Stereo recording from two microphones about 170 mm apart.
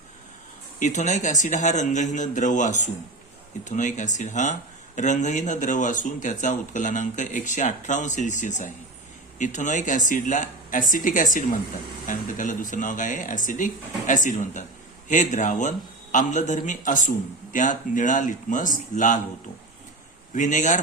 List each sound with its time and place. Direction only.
0.8 s speech: 45° left (ahead or behind)
20.3 s speech: 45° left (ahead or behind)